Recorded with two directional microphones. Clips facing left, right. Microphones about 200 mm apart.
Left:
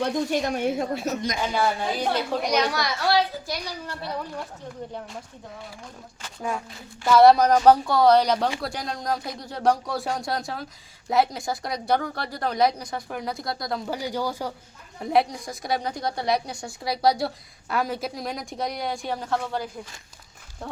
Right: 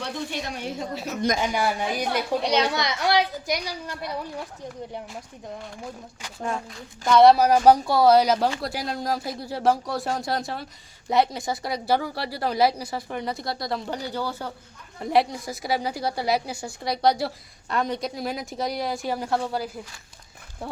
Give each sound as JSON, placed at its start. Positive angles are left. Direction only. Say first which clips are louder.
{"t": 0.0, "sound": "a woman's voice", "louder": "left 7 dB", "side_deg": 45}
{"t": 1.5, "sound": "a child's voice", "louder": "left 1 dB", "side_deg": -15}
{"t": 2.4, "sound": "a child's voice", "louder": "right 1 dB", "side_deg": -30}
{"t": 7.0, "sound": "a woman's voice", "louder": "even", "side_deg": 0}
{"t": 14.0, "sound": "speech", "louder": "left 2 dB", "side_deg": 10}
{"t": 15.1, "sound": "a woman's voice", "louder": "even", "side_deg": 0}